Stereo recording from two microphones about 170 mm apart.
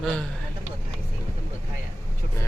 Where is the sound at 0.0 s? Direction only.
5° left (ahead or behind).